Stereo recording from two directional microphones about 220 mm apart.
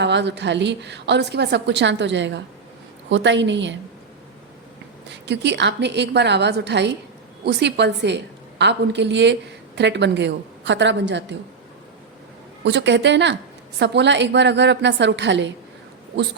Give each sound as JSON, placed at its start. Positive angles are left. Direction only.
{"t": 0.0, "sound": "a woman's voice", "side_deg": -50}
{"t": 5.0, "sound": "a woman's voice", "side_deg": -50}
{"t": 12.6, "sound": "a woman's voice", "side_deg": -55}